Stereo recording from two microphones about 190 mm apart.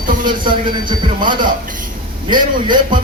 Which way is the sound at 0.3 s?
25° right (ahead or behind).